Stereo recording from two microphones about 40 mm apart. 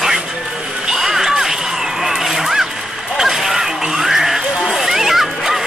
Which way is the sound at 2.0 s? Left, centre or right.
Centre.